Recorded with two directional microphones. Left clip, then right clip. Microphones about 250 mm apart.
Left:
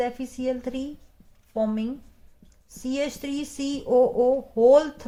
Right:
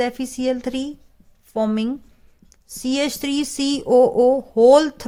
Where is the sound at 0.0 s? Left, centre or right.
Right.